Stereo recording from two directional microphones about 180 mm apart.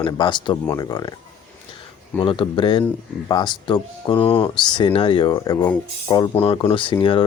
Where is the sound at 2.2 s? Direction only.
30° left (ahead or behind).